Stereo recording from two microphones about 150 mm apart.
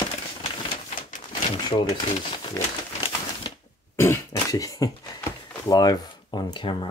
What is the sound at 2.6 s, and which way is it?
Speech, 20° left (ahead or behind).